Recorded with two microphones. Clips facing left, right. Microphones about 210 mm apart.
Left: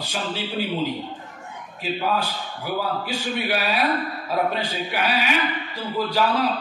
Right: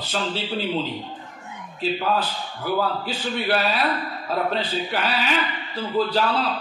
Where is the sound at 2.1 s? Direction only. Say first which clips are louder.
Even; 10° left (ahead or behind).